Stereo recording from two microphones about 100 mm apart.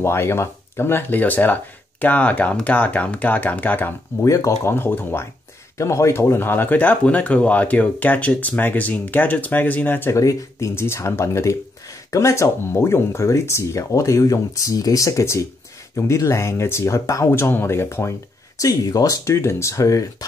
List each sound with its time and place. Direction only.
0.0 s speech: 25° left (ahead or behind)
4.2 s speech: 30° left (ahead or behind)